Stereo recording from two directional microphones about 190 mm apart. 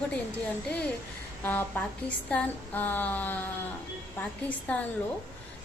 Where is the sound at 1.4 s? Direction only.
10° left (ahead or behind).